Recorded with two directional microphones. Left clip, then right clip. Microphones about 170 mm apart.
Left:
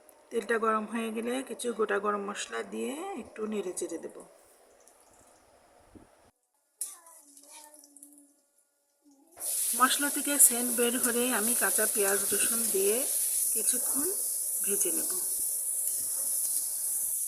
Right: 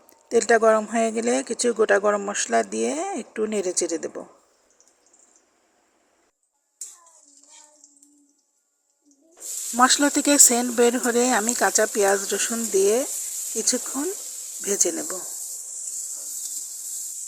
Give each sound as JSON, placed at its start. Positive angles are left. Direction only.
{"t": 0.3, "sound": "speech", "side_deg": -35}
{"t": 0.9, "sound": "speech", "side_deg": -35}
{"t": 2.0, "sound": "speech", "side_deg": -25}
{"t": 2.5, "sound": "speech", "side_deg": -35}
{"t": 9.7, "sound": "speech", "side_deg": -40}
{"t": 14.6, "sound": "speech", "side_deg": -35}